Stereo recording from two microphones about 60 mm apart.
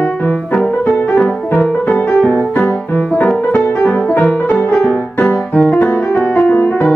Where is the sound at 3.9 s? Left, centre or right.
Left.